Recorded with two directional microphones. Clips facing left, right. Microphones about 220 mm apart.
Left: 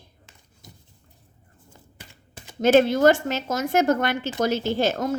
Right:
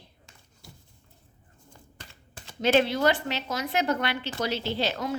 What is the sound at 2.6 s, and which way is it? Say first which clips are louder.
Speech: left 6 dB; 45° left (ahead or behind).